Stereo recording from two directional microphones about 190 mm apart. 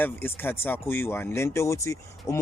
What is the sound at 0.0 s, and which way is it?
Speech, 10° left (ahead or behind).